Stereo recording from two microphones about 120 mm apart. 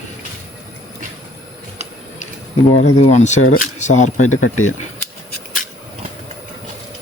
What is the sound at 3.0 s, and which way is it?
Speech, 75° left (ahead or behind).